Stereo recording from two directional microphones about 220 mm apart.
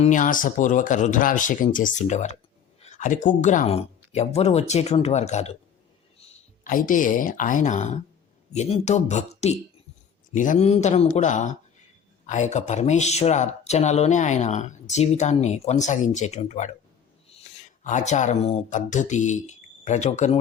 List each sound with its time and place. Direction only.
0.0 s speech: 35° left (ahead or behind)